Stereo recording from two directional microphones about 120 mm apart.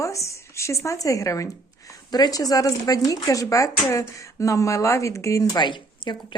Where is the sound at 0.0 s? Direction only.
25° left (ahead or behind).